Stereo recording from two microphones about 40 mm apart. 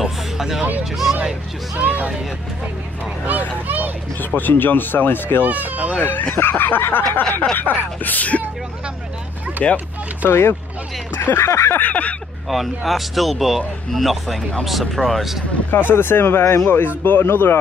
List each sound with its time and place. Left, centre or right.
0.0 s vehicle: centre
1.8 s speech: right
3.6 s speech: right
4.4 s speech: left
5.4 s speech: right
5.9 s speech: left
9.6 s speech: left
10.2 s speech: left
11.1 s speech: left
11.9 s speech: left
12.4 s speech: centre
15.7 s speech: left